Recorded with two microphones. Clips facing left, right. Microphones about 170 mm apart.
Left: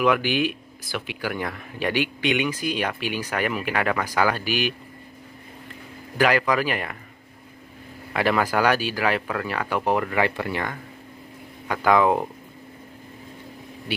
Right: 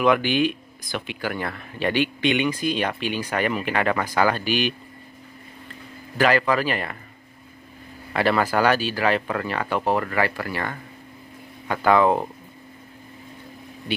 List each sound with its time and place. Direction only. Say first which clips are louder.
0.0 s speech: right 2 dB; 5° left (ahead or behind)
6.1 s speech: right 1 dB; 10° left (ahead or behind)
8.1 s speech: right 1 dB; 10° left (ahead or behind)
11.6 s speech: right 1 dB; 10° left (ahead or behind)
13.9 s speech: right 2 dB; 5° left (ahead or behind)